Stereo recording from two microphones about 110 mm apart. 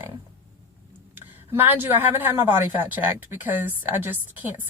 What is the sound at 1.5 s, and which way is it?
Speech, 20° right (ahead or behind).